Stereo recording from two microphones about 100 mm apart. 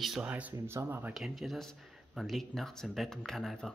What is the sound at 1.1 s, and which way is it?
Speech, centre (ahead or behind).